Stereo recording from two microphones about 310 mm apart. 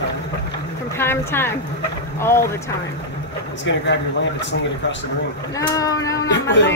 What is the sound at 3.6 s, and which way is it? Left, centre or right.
Speech, left.